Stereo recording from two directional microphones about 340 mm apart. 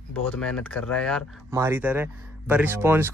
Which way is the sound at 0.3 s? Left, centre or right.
Centre.